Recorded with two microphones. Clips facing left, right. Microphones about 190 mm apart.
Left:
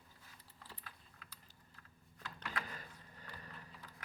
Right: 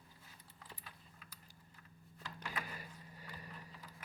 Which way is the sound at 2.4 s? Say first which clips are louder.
Even; 10° right (ahead or behind).